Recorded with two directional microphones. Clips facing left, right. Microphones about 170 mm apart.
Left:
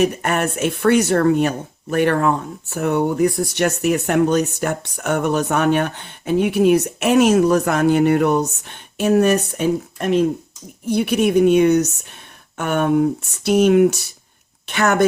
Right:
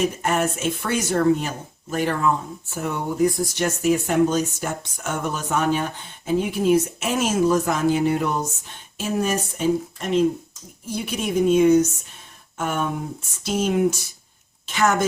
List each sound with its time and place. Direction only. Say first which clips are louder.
0.0 s speech: left 3 dB; 65° left (ahead or behind)